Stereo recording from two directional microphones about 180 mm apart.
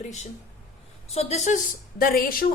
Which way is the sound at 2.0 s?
55° left (ahead or behind).